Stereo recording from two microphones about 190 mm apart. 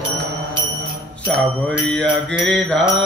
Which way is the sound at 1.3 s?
5° left (ahead or behind).